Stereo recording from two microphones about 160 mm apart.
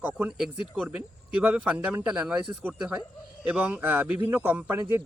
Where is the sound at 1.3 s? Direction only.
10° right (ahead or behind).